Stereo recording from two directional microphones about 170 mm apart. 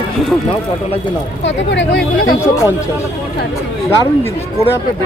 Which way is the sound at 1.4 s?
90° left.